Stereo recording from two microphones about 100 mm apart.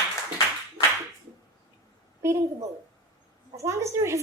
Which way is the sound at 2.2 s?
30° right (ahead or behind).